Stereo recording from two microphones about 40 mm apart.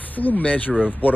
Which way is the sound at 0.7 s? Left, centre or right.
Right.